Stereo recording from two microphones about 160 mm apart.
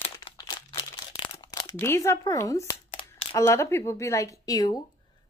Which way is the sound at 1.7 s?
15° left (ahead or behind).